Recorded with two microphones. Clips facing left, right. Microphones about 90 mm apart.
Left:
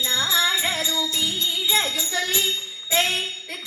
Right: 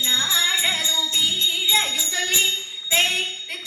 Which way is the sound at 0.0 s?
15° left (ahead or behind).